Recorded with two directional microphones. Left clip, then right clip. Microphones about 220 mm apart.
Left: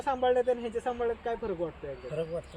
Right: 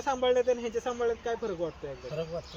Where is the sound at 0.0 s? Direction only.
10° right (ahead or behind).